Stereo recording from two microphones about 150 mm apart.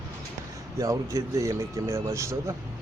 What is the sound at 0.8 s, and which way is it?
Speech, 20° right (ahead or behind).